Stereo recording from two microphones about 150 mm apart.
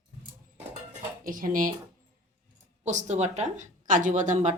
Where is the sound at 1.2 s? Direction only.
65° right (ahead or behind).